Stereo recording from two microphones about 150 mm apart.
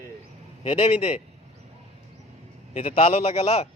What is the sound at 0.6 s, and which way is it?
Speech, 40° left (ahead or behind).